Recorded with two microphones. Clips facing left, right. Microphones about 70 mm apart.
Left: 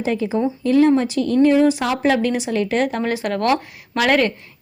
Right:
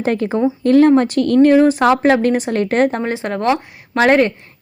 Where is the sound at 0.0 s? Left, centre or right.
Right.